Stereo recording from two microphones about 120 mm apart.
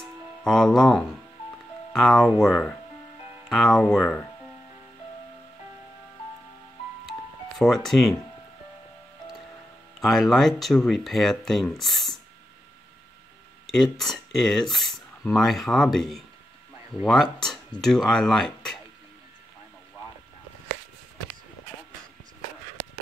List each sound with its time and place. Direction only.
0.4 s speech: 5° left (ahead or behind)
7.1 s ice cream truck: centre (ahead or behind)
9.9 s speech: centre (ahead or behind)
13.7 s speech: 5° left (ahead or behind)